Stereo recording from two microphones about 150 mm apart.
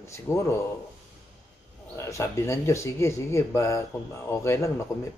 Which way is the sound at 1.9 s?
20° left (ahead or behind).